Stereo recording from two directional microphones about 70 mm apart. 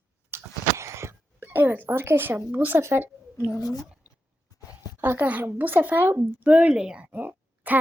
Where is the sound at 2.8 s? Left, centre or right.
Right.